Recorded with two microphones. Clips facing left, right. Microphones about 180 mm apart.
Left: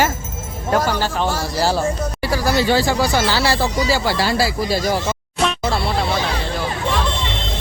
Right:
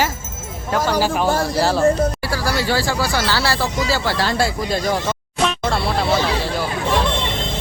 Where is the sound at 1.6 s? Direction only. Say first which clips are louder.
Left 3 dB; centre (ahead or behind).